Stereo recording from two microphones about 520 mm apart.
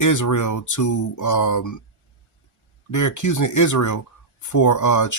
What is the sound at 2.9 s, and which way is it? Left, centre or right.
Speech, left.